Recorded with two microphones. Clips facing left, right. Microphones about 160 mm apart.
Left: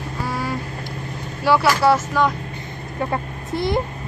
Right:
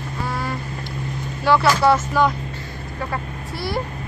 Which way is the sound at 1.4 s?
5° left (ahead or behind).